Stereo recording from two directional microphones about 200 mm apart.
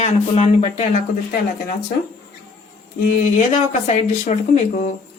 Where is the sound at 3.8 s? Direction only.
35° left (ahead or behind).